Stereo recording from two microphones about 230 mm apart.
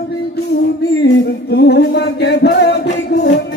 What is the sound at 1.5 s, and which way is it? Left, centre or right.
Music, left.